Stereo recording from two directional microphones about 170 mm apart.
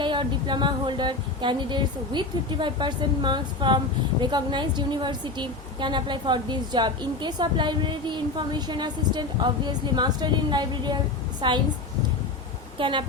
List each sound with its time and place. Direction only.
0.0 s a woman's voice: 30° right (ahead or behind)
12.8 s speech: 30° right (ahead or behind)